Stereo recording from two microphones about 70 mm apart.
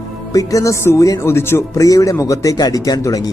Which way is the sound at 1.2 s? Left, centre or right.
Left.